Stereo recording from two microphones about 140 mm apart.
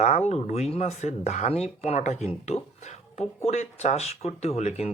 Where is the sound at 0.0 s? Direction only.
50° left (ahead or behind).